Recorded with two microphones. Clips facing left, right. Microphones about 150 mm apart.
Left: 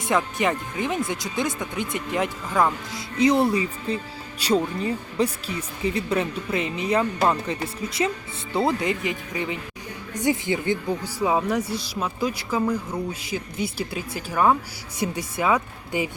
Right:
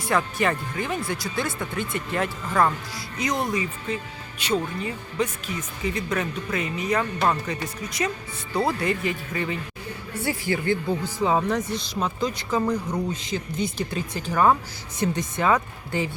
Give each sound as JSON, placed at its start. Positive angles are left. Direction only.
{"t": 0.0, "sound": "speech", "side_deg": 20}
{"t": 2.9, "sound": "speech", "side_deg": 30}